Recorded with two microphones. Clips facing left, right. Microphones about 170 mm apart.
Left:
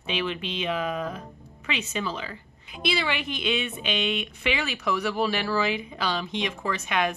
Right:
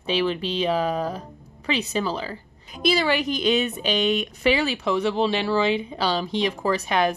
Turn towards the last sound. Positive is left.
turn(degrees=-35)  # may be behind; listen again after turning